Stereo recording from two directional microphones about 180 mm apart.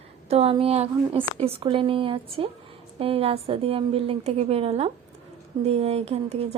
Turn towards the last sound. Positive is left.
turn(degrees=-35)  # may be behind; listen again after turning